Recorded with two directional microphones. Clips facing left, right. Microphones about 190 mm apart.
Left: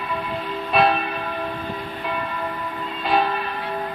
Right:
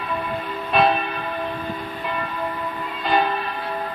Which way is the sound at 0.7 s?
Centre (ahead or behind).